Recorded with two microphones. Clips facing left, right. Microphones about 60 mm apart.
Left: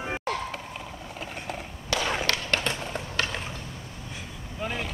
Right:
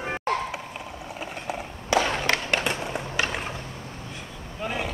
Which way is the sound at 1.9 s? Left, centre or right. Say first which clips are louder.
Right 6 dB; right.